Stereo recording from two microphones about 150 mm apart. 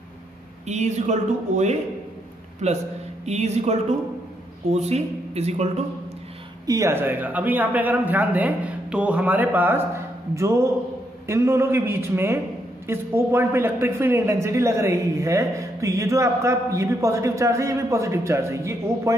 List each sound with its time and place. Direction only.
0.7 s speech: 50° right (ahead or behind)
6.6 s a man's voice: 20° right (ahead or behind)